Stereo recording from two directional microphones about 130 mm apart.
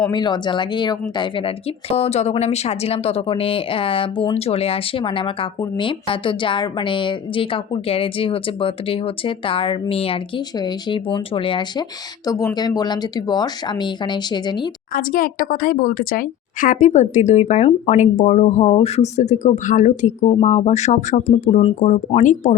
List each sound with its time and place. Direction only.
0.1 s speech: 35° left (ahead or behind)
12.2 s speech: 25° left (ahead or behind)
14.9 s speech: 90° left; by 20.1 s 70° left (ahead or behind)
20.2 s speech: 55° left (ahead or behind); by 22.4 s 70° left (ahead or behind)